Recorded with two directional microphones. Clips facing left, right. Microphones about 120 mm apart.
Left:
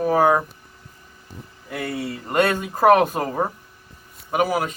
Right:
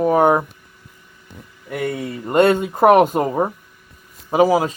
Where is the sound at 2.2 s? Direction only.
25° right (ahead or behind).